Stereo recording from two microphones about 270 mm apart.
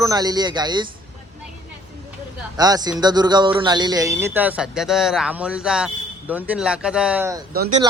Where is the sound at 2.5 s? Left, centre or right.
Centre.